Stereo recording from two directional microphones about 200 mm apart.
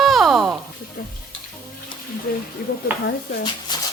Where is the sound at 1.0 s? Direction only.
45° left (ahead or behind).